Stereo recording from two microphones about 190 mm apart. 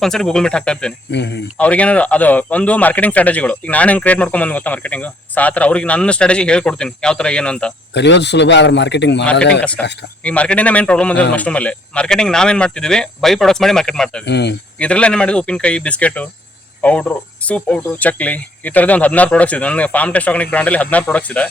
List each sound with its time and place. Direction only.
0.0 s a man's voice: 5° left (ahead or behind)
1.1 s a man's voice: 65° left (ahead or behind)
1.5 s speech: 5° left (ahead or behind)
7.9 s a man's voice: 65° left (ahead or behind)
9.6 s a man's voice: 5° left (ahead or behind)
14.3 s a man's voice: 65° left (ahead or behind)
14.8 s a man's voice: 5° left (ahead or behind)